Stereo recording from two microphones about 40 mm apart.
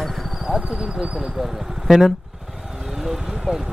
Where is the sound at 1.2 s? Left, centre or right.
Centre.